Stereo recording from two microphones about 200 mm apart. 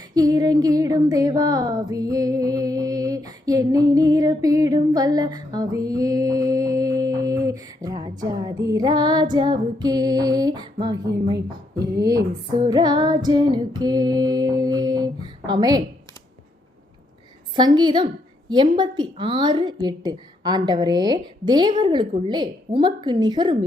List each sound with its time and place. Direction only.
0.1 s a sound: 20° right (ahead or behind)
9.3 s a woman's voice: 20° right (ahead or behind)
17.7 s a woman's voice: 20° right (ahead or behind)